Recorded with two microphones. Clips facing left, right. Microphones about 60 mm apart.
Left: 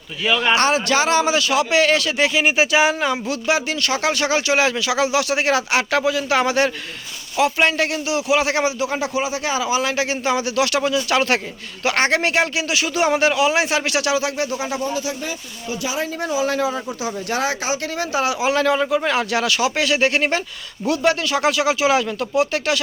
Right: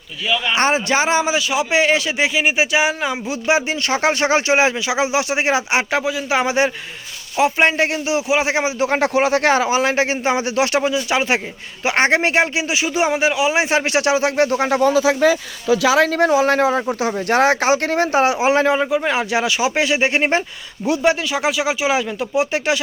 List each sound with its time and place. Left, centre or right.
0.5 s speech: right
1.2 s speech: centre
3.4 s speech: right
8.8 s speech: right
9.6 s speech: right
15.6 s speech: right; by 22.8 s centre